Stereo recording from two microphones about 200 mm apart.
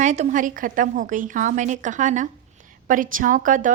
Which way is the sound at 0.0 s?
35° right (ahead or behind).